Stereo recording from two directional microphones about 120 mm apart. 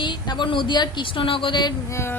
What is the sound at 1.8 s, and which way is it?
Music, 20° left (ahead or behind).